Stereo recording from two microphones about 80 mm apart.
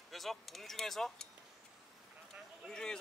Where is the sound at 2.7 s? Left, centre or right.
Centre.